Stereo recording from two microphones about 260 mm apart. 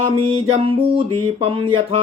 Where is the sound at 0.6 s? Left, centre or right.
Centre.